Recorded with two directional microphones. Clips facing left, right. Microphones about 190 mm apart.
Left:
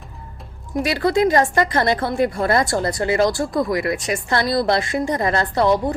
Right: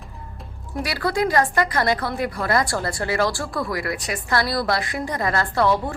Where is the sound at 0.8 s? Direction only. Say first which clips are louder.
Left 5 dB; 20° left (ahead or behind).